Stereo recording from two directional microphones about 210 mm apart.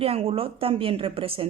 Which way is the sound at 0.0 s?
25° right (ahead or behind).